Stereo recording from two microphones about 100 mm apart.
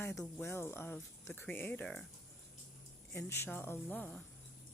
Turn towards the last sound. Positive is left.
turn(degrees=20)  # may be behind; listen again after turning